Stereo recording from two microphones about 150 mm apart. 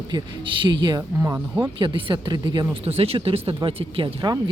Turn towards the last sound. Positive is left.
turn(degrees=-30)  # may be behind; listen again after turning